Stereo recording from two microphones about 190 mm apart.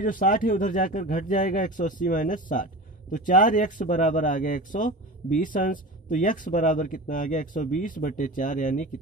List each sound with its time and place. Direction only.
0.0 s speech: 45° left (ahead or behind)